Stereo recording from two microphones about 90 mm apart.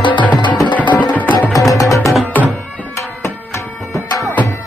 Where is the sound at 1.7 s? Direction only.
40° left (ahead or behind).